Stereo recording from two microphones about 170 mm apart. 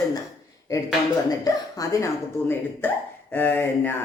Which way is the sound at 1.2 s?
20° left (ahead or behind).